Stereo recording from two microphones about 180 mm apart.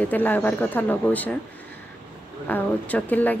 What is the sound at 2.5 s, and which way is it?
Speech, 10° left (ahead or behind).